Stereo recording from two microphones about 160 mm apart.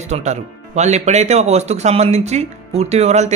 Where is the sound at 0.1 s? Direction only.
45° right (ahead or behind).